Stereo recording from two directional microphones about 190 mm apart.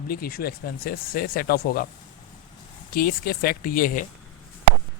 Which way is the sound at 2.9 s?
50° left (ahead or behind).